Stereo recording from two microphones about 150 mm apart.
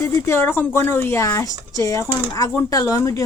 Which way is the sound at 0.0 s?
15° left (ahead or behind).